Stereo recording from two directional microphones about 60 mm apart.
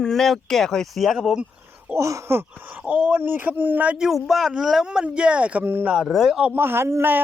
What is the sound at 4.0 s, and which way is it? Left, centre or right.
Speech, centre.